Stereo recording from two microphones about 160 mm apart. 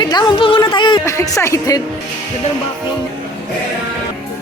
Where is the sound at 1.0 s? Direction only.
20° left (ahead or behind).